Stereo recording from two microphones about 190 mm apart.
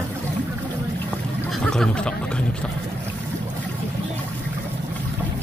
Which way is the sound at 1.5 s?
5° left (ahead or behind).